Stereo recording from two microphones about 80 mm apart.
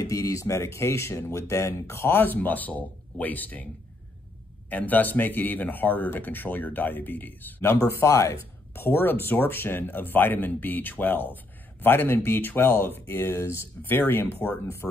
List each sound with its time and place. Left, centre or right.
0.0 s speech: left
4.6 s speech: left
7.7 s speech: left